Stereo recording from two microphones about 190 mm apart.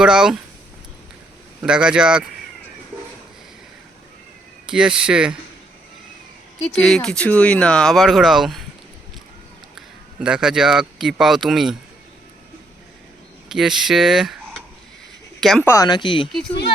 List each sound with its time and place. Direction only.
0.0 s speech: 5° right (ahead or behind)
1.6 s speech: 5° right (ahead or behind)
4.7 s speech: 5° right (ahead or behind)
6.6 s speech: 5° left (ahead or behind)
9.7 s speech: 5° right (ahead or behind)
13.5 s speech: centre (ahead or behind)
15.4 s speech: centre (ahead or behind)
15.6 s speech: 15° left (ahead or behind)